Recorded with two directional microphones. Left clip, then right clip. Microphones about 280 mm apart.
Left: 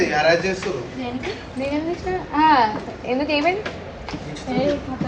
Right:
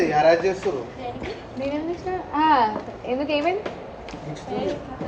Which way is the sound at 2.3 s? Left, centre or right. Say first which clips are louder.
Left 3 dB; centre.